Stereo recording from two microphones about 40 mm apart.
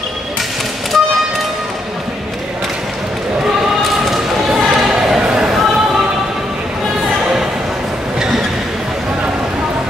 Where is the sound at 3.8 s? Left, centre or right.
Centre.